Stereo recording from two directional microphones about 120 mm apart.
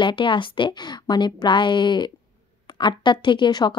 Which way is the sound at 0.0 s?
45° left (ahead or behind).